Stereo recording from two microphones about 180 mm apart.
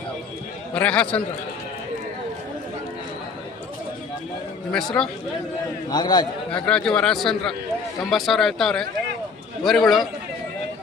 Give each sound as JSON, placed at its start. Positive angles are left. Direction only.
{"t": 0.7, "sound": "a man's voice", "side_deg": 5}
{"t": 4.7, "sound": "a man's voice", "side_deg": 5}
{"t": 5.9, "sound": "a man's voice", "side_deg": 25}
{"t": 6.5, "sound": "a man's voice", "side_deg": 5}